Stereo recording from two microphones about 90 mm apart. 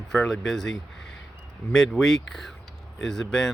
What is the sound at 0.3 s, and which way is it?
A man's voice, 5° left (ahead or behind).